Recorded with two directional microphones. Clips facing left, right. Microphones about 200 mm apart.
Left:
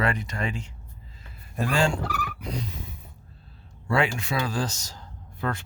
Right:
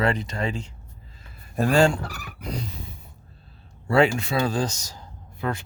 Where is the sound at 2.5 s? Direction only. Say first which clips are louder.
Right 3 dB; 35° right (ahead or behind).